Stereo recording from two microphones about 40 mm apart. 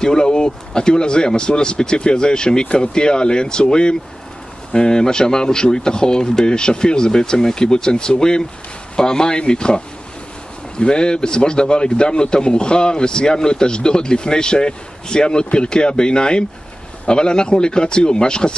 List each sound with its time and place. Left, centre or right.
0.0 s a man's voice: centre